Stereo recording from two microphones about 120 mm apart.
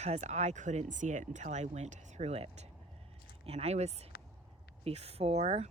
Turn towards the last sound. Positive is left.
turn(degrees=-60)  # may be behind; listen again after turning